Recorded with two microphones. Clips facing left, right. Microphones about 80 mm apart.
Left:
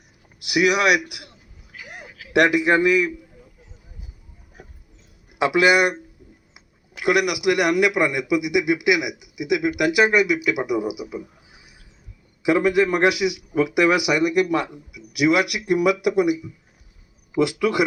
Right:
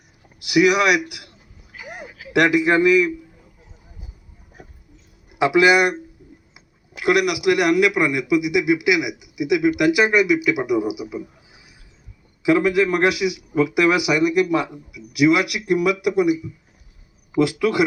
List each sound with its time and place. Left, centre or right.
0.5 s a man's voice: centre
1.7 s a sound: centre
2.4 s a man's voice: centre
5.4 s a man's voice: centre
7.0 s a man's voice: centre
12.5 s a man's voice: centre
17.4 s a man's voice: centre